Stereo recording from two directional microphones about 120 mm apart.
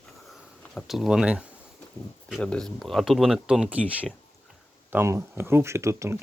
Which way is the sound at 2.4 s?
5° left (ahead or behind).